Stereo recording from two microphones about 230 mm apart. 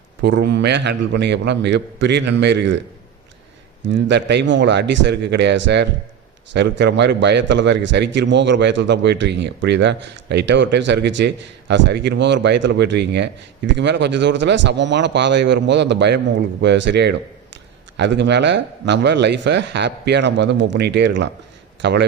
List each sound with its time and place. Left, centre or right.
0.2 s a man's voice: right
3.8 s a man's voice: right